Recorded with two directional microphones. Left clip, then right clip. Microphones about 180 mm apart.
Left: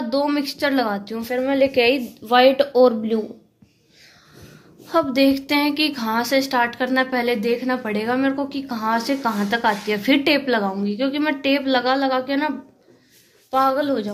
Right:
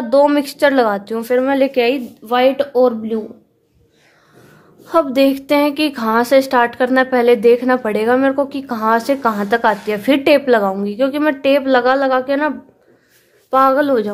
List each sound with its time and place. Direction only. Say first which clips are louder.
0.1 s a woman's voice: right 10 dB; 40° right (ahead or behind)
1.7 s a woman's voice: right 2 dB; 15° right (ahead or behind)
2.2 s speech: right 1 dB; 5° right (ahead or behind)
4.8 s a woman's voice: right 5 dB; 35° right (ahead or behind)